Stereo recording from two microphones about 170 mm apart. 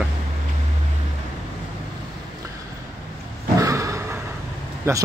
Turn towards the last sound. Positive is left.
turn(degrees=-15)  # may be behind; listen again after turning